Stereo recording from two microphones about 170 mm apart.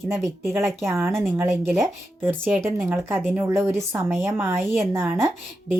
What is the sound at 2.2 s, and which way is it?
Speech, 10° right (ahead or behind).